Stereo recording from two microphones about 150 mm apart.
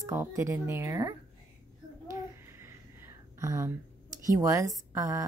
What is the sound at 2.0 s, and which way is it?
Babbling, 20° right (ahead or behind).